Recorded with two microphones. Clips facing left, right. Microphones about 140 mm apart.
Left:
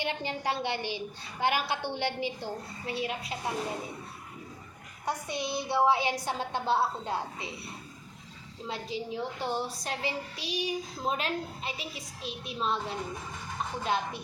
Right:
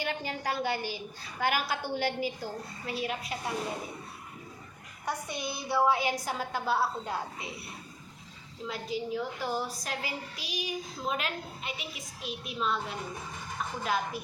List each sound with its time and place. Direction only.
0.0 s a woman's voice: 25° left (ahead or behind)
5.0 s a woman's voice: 20° left (ahead or behind)
8.6 s a woman's voice: 30° left (ahead or behind)